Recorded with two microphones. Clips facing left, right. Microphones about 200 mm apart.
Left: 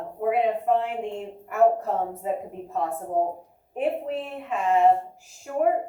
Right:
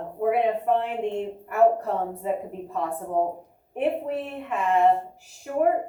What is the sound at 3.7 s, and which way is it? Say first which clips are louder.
A woman's voice: right 1 dB; 60° right (ahead or behind).